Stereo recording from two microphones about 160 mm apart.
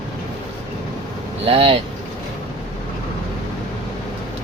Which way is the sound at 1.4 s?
35° right (ahead or behind).